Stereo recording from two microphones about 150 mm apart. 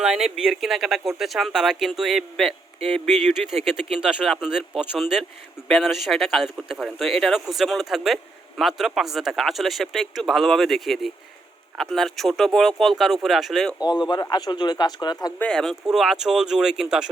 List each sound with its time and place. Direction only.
0.0 s speech: 5° right (ahead or behind)
13.8 s speech: 30° left (ahead or behind)
15.4 s speech: 5° left (ahead or behind)